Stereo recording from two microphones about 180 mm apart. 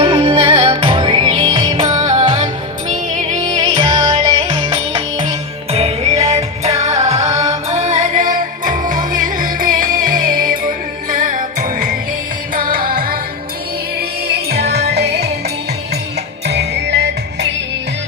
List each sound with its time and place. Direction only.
0.0 s music: 25° right (ahead or behind); by 13.1 s 55° right (ahead or behind)
14.3 s music: 65° right (ahead or behind)
16.5 s music: 70° right (ahead or behind)